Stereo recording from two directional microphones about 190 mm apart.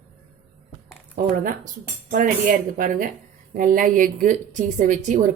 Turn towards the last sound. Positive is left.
turn(degrees=-40)  # may be behind; listen again after turning